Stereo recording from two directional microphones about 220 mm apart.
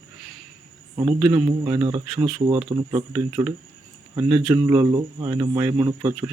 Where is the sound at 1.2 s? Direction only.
5° right (ahead or behind).